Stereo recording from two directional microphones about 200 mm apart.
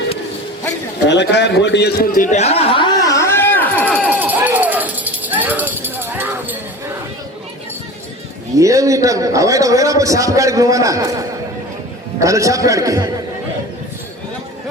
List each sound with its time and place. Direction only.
1.0 s a sound: 60° left (ahead or behind); by 4.1 s 5° left (ahead or behind)
4.1 s music: 10° right (ahead or behind)
8.5 s a man's voice: 15° right (ahead or behind)